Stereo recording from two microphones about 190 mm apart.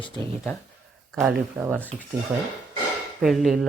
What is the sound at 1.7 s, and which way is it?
Speech, 10° left (ahead or behind).